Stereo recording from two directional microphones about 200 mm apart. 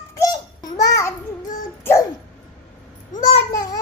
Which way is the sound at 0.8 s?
15° left (ahead or behind).